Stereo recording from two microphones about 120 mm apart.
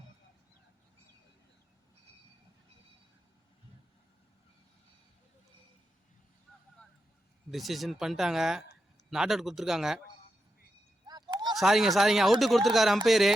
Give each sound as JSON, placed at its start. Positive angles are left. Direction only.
{"t": 7.5, "sound": "speech", "side_deg": 0}
{"t": 11.0, "sound": "a sound", "side_deg": -35}
{"t": 11.5, "sound": "speech", "side_deg": -5}